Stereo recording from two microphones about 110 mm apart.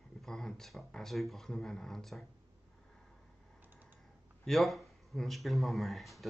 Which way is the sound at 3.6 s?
15° right (ahead or behind).